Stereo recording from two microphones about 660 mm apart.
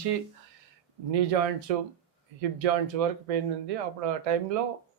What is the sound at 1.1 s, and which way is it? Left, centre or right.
A man's voice, right.